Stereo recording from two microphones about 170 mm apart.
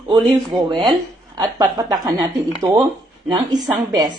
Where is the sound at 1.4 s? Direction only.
25° right (ahead or behind).